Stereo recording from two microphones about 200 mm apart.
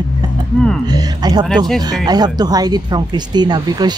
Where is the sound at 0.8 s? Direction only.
20° right (ahead or behind).